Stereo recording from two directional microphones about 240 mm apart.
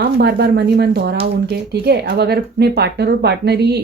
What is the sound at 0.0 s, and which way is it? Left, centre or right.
Speech, right.